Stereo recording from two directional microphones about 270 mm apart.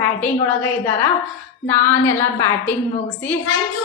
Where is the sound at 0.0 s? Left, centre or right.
Centre.